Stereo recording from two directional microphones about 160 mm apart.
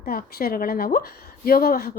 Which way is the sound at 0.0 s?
70° left (ahead or behind).